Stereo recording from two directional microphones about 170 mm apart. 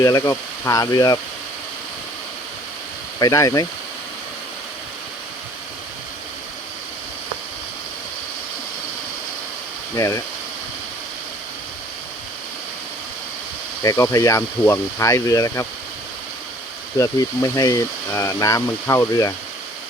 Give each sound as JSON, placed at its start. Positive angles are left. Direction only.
{"t": 0.0, "sound": "speech", "side_deg": 20}
{"t": 3.2, "sound": "speech", "side_deg": 20}
{"t": 9.9, "sound": "speech", "side_deg": 20}
{"t": 13.8, "sound": "speech", "side_deg": 20}
{"t": 17.0, "sound": "speech", "side_deg": 20}